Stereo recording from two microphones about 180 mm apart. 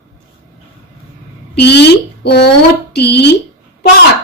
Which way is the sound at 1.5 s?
65° left (ahead or behind).